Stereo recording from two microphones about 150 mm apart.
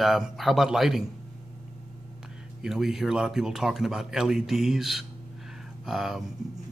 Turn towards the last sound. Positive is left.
turn(degrees=0)  # may be behind; listen again after turning